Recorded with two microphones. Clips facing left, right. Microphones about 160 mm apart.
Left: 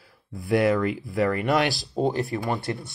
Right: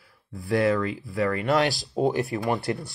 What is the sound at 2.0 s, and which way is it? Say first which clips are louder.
Speech: right 1 dB; 5° right (ahead or behind).